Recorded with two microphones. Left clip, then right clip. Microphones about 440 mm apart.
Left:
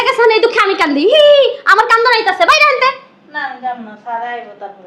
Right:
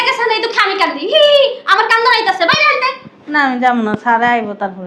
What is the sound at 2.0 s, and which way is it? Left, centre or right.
Speech, left.